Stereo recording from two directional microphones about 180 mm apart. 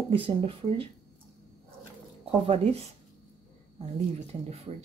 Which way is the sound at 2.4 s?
35° right (ahead or behind).